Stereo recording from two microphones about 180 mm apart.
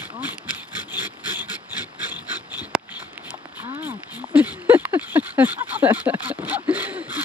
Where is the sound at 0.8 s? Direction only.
10° right (ahead or behind).